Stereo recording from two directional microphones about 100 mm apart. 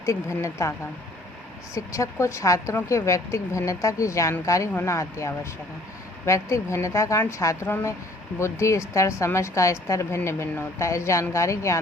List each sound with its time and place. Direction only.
0.0 s a woman's voice: 30° left (ahead or behind)
1.7 s a woman's voice: 30° left (ahead or behind)